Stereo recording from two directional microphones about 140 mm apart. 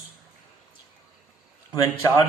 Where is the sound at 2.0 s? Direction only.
25° left (ahead or behind).